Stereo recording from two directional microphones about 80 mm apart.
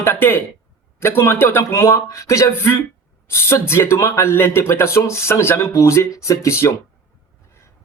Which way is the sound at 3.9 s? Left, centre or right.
Left.